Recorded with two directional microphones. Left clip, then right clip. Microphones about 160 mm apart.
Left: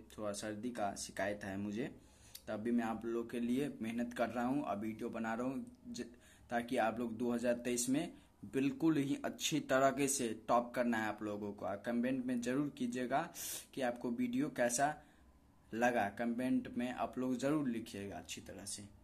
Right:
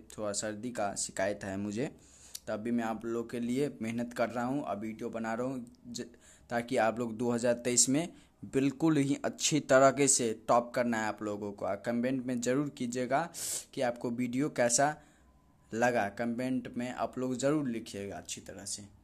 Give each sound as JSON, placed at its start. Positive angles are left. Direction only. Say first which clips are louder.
{"t": 0.1, "sound": "speech", "louder": "right 6 dB", "side_deg": -35}